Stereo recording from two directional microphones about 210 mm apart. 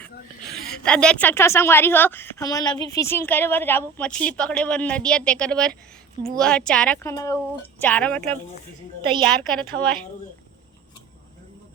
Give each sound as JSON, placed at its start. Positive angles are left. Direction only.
{"t": 0.5, "sound": "a woman's voice", "side_deg": 5}
{"t": 9.0, "sound": "a woman's voice", "side_deg": -25}
{"t": 9.2, "sound": "a woman's voice", "side_deg": 5}